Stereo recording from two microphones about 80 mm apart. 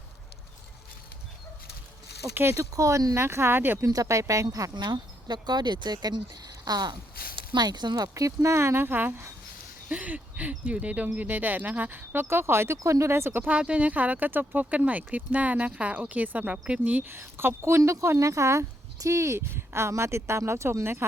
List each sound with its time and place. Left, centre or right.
2.3 s speech: right
2.7 s speech: right
3.2 s speech: right
3.8 s speech: right
4.7 s speech: right
9.9 s speech: centre
17.1 s speech: right